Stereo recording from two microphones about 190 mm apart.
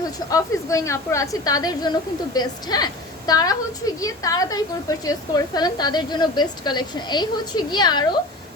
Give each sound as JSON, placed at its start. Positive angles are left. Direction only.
{"t": 0.0, "sound": "a woman's voice", "side_deg": 20}